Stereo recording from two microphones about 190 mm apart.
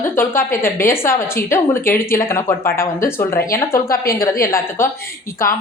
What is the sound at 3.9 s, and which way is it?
Speech, 50° left (ahead or behind).